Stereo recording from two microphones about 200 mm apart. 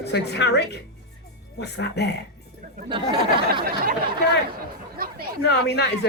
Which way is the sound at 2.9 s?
25° right (ahead or behind).